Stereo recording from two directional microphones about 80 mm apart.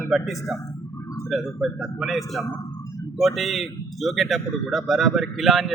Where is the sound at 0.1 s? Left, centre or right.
Centre.